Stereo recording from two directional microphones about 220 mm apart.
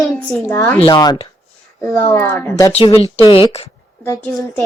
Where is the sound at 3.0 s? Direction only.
25° left (ahead or behind).